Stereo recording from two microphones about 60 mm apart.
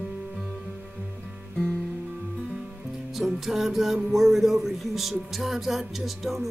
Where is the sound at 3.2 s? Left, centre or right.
Centre.